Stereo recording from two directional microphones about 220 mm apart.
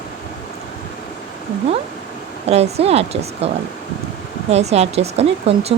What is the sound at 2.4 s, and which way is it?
Speech, 30° right (ahead or behind).